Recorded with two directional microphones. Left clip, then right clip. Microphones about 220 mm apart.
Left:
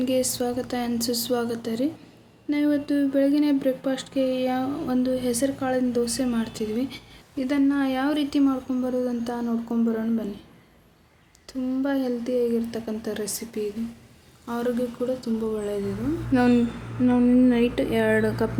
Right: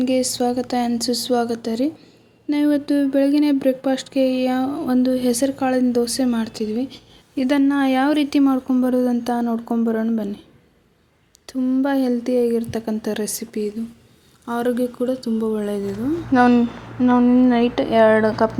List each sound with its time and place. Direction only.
0.0 s speech: 25° right (ahead or behind)
7.3 s speech: 35° right (ahead or behind)
11.4 s speech: 30° right (ahead or behind)
16.3 s a woman's voice: 10° right (ahead or behind)